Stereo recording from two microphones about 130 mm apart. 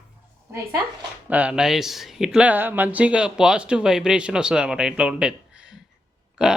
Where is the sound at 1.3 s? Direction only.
10° right (ahead or behind).